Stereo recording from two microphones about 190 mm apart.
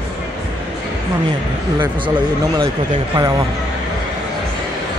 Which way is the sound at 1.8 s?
20° right (ahead or behind).